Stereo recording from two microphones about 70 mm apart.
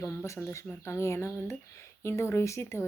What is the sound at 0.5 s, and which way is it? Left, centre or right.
Speech, left.